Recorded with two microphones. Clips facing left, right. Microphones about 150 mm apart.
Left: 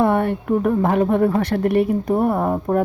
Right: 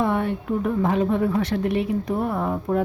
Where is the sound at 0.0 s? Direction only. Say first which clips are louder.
Left 5 dB; 55° left (ahead or behind).